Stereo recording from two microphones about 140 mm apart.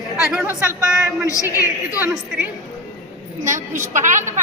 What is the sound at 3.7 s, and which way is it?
Speech, 65° right (ahead or behind).